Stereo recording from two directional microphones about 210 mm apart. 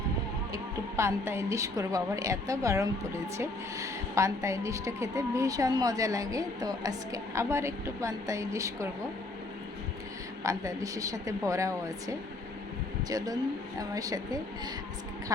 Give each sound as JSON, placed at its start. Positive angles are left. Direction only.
{"t": 0.5, "sound": "a woman's voice", "side_deg": -15}
{"t": 10.4, "sound": "a woman's voice", "side_deg": -15}